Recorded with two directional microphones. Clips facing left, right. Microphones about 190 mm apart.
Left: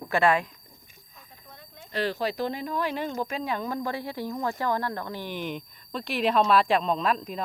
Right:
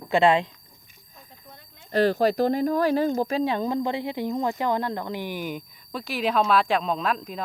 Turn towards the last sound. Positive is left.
turn(degrees=0)  # may be behind; listen again after turning